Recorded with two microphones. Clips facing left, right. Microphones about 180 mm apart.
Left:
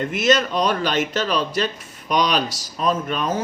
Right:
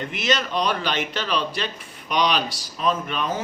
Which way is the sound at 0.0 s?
45° left (ahead or behind).